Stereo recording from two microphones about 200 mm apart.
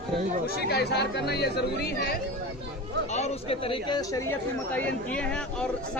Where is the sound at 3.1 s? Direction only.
30° left (ahead or behind); by 4.2 s 15° left (ahead or behind).